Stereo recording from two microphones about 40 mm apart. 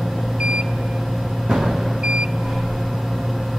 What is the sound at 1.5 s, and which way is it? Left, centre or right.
Vehicle, centre.